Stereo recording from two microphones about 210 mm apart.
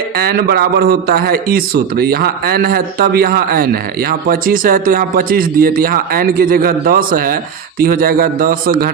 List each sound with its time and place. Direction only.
0.2 s a man's voice: 45° right (ahead or behind)